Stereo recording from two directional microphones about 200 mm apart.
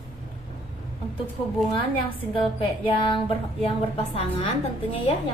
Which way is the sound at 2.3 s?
25° left (ahead or behind).